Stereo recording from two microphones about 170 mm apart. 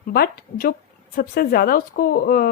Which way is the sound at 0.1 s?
65° left (ahead or behind).